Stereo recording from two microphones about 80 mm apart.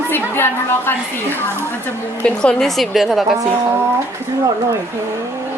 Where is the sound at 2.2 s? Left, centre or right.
Centre.